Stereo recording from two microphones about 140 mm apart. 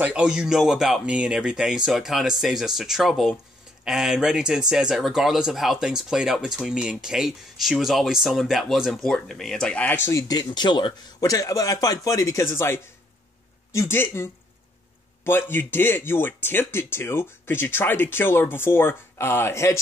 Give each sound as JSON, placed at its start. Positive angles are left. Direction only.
{"t": 0.0, "sound": "speech", "side_deg": -5}